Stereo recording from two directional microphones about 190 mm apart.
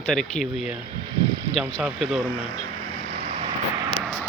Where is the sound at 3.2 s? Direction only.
35° right (ahead or behind).